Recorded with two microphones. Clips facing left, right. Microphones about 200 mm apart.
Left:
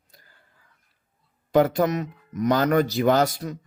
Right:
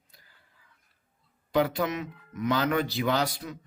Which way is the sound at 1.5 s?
45° left (ahead or behind).